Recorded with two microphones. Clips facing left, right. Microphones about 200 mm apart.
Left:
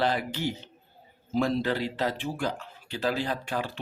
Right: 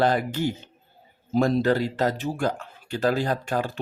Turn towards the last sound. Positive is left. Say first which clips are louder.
# right 5 dB
turn(degrees=-45)  # may be behind; listen again after turning